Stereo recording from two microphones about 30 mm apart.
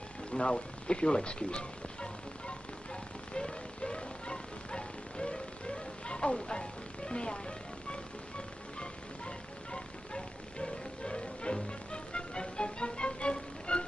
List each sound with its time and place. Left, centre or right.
0.3 s speech: left
3.3 s music: left